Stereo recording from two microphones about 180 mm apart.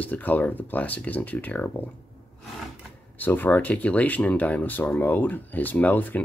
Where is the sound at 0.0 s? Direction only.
10° left (ahead or behind).